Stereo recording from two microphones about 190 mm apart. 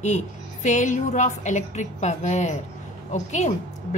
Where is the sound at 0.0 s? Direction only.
40° left (ahead or behind).